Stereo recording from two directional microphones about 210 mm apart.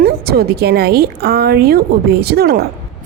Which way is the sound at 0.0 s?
45° right (ahead or behind).